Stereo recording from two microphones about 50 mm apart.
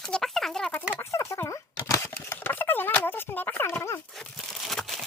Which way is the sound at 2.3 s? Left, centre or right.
Left.